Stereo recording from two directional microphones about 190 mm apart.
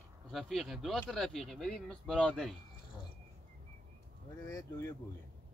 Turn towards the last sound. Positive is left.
turn(degrees=15)  # may be behind; listen again after turning